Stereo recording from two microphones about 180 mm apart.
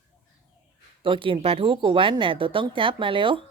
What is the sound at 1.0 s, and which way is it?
Speech, 30° right (ahead or behind).